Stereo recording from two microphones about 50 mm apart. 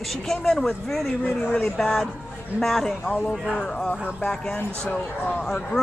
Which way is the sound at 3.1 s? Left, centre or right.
Centre.